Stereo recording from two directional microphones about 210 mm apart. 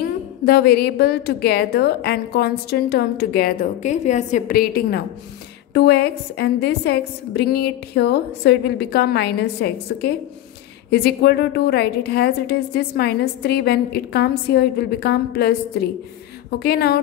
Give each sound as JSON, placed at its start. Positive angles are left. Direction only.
{"t": 0.5, "sound": "a woman's voice", "side_deg": 50}